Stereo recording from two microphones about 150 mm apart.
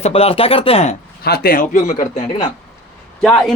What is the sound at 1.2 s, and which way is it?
Speech, 90° left.